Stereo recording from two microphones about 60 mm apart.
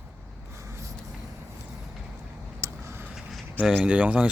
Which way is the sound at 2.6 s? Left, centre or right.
Right.